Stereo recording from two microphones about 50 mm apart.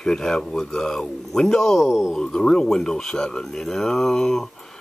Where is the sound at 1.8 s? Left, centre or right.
Centre.